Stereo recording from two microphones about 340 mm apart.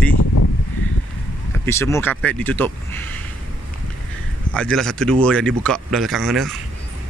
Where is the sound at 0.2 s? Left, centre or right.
Left.